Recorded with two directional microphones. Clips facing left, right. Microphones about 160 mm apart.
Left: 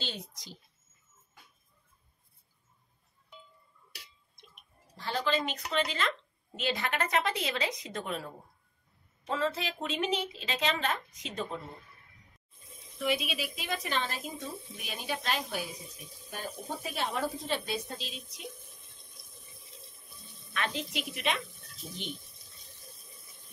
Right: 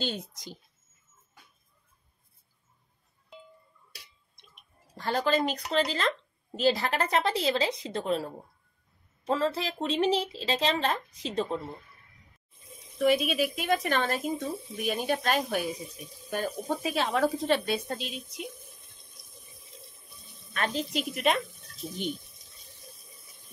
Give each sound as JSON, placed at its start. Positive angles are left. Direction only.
{"t": 0.0, "sound": "a woman's voice", "side_deg": -50}
{"t": 4.9, "sound": "a woman's voice", "side_deg": -45}
{"t": 13.0, "sound": "a woman's voice", "side_deg": -50}
{"t": 16.3, "sound": "speech", "side_deg": -85}
{"t": 18.3, "sound": "water", "side_deg": 0}
{"t": 20.5, "sound": "a woman's voice", "side_deg": -40}
{"t": 22.9, "sound": "a sound", "side_deg": 0}